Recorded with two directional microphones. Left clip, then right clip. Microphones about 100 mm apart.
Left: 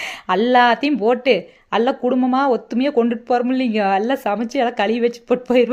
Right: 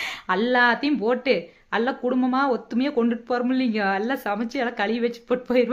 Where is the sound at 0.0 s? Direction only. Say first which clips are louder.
Left 5 dB; 40° left (ahead or behind).